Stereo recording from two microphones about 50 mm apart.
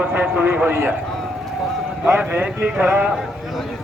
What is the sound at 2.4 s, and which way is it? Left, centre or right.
Speech, right.